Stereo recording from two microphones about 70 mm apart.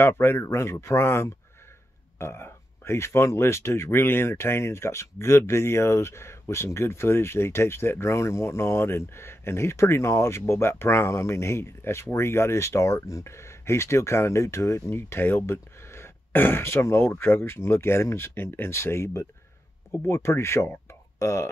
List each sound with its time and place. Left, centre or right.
0.0 s speech: left